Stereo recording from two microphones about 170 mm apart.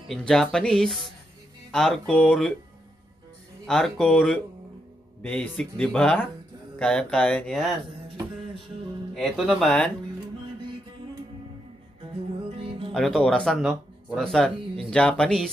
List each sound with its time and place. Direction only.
0.1 s speech: 5° left (ahead or behind)
3.6 s speech: 5° left (ahead or behind)
9.1 s speech: centre (ahead or behind)
12.5 s music: 35° right (ahead or behind)
12.9 s speech: centre (ahead or behind)